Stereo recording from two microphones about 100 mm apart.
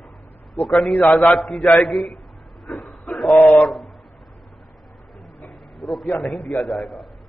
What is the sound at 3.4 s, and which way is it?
Speech, centre (ahead or behind).